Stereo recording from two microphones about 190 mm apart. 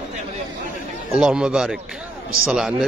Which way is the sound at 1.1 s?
5° right (ahead or behind).